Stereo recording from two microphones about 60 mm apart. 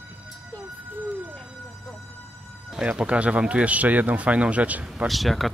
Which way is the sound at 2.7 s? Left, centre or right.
Centre.